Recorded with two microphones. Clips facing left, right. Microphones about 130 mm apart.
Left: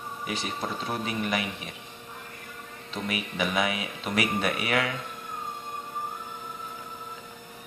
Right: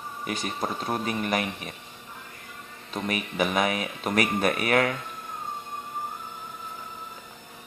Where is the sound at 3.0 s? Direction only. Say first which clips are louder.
Right 3 dB; 45° right (ahead or behind).